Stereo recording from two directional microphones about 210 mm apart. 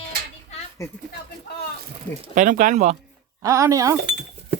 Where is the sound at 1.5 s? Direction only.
50° left (ahead or behind).